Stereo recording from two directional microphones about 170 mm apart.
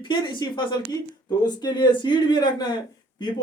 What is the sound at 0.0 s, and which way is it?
Speech, 25° left (ahead or behind).